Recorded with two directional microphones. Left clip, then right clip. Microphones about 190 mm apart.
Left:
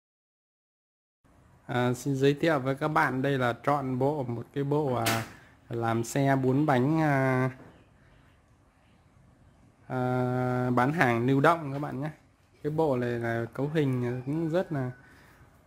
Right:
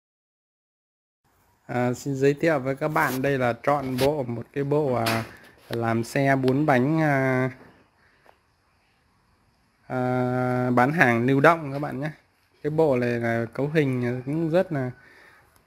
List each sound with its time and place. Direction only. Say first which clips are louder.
1.7 s speech: right 3 dB; 5° right (ahead or behind)
9.8 s speech: right 4 dB; 15° right (ahead or behind)
14.2 s speech: right 4 dB; centre (ahead or behind)
14.5 s speech: right 8 dB; 20° right (ahead or behind)